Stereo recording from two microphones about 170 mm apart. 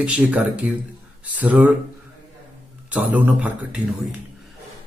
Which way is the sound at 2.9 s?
10° right (ahead or behind).